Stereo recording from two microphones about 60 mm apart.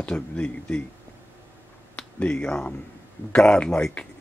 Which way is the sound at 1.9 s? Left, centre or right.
Centre.